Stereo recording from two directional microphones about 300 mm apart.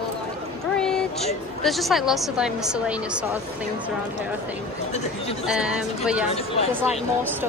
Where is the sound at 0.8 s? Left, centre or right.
Centre.